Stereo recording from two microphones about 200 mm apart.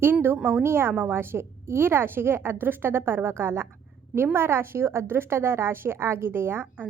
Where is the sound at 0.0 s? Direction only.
10° right (ahead or behind).